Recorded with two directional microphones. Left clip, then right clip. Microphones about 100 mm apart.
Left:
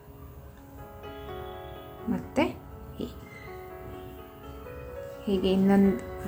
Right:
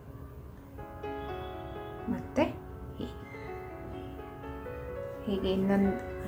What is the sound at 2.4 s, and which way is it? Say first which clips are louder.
Speech: left 2 dB; 55° left (ahead or behind).